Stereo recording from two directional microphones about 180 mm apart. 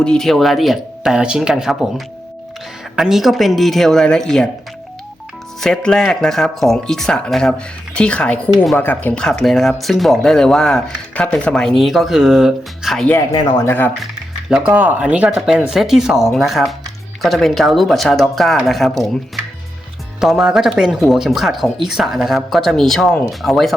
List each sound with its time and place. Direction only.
0.0 s speech: 5° left (ahead or behind)
2.9 s speech: centre (ahead or behind)
5.5 s speech: centre (ahead or behind)
13.1 s speech: 20° left (ahead or behind)
14.5 s speech: 5° right (ahead or behind)
20.1 s speech: centre (ahead or behind)